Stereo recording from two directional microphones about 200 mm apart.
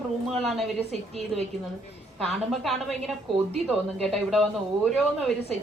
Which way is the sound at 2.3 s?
Centre (ahead or behind).